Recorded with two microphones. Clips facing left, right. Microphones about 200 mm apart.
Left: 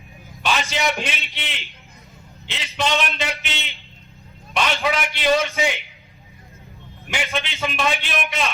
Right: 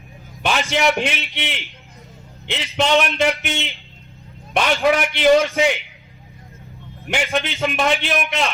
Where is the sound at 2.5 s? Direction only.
60° right (ahead or behind).